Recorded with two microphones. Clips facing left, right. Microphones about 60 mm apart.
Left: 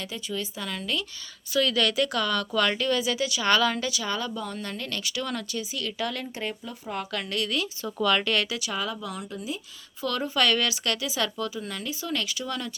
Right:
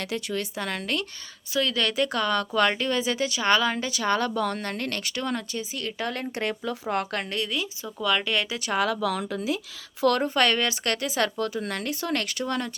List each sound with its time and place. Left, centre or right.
0.0 s a woman's voice: right
1.5 s speech: right
4.0 s a woman's voice: right
4.4 s a woman's voice: right
4.6 s speech: right
6.3 s a woman's voice: right
7.3 s speech: centre
8.4 s speech: right
8.8 s speech: right
10.2 s speech: right
10.9 s a woman's voice: right